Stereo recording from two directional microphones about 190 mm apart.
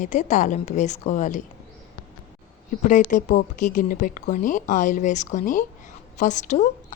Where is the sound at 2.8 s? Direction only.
45° left (ahead or behind).